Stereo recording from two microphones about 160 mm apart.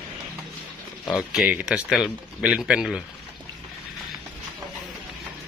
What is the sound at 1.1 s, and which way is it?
Speech, 5° right (ahead or behind).